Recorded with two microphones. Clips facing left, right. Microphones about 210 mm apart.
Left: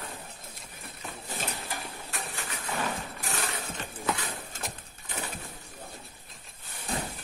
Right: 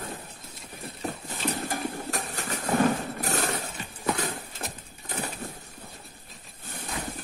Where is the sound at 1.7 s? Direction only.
40° right (ahead or behind).